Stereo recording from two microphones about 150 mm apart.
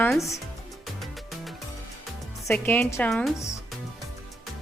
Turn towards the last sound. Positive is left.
turn(degrees=5)  # may be behind; listen again after turning